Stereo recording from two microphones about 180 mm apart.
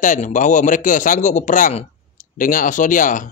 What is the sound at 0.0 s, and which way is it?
Speech, 45° left (ahead or behind).